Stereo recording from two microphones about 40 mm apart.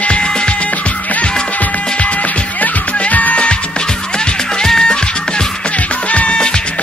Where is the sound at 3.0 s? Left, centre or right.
Left.